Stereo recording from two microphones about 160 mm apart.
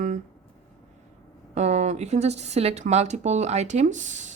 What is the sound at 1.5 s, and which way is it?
Speech, 45° right (ahead or behind).